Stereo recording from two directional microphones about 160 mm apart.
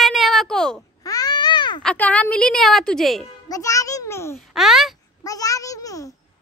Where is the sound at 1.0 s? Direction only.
25° left (ahead or behind).